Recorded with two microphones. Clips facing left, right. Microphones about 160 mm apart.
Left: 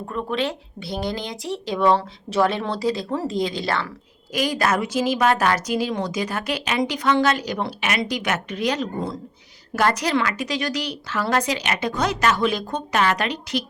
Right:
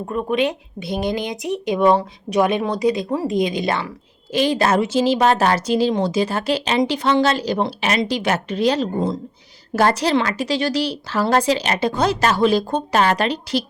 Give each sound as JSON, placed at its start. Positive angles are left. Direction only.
{"t": 0.1, "sound": "speech", "side_deg": -15}